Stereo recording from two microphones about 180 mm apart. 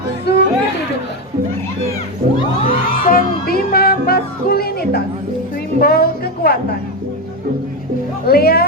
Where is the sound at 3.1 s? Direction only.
60° left (ahead or behind).